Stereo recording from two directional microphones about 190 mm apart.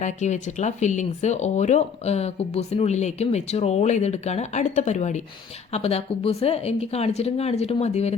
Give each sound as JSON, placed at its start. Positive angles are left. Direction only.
{"t": 0.0, "sound": "speech", "side_deg": 40}